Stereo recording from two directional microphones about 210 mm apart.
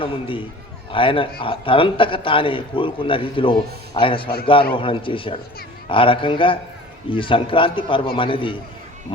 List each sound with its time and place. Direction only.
0.0 s a man's voice: 25° left (ahead or behind)